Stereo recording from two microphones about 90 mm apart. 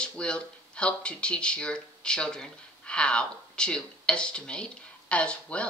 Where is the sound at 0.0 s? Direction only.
10° left (ahead or behind).